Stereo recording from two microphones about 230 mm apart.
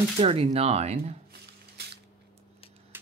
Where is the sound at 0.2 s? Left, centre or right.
Right.